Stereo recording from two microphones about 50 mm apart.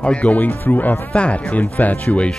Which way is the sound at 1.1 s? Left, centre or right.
Left.